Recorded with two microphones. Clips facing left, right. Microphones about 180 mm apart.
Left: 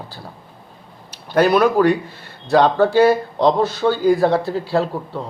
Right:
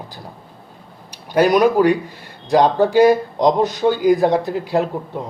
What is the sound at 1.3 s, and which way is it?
Speech, 15° right (ahead or behind).